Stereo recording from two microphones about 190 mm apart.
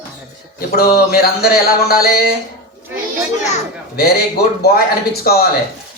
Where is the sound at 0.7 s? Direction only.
55° left (ahead or behind).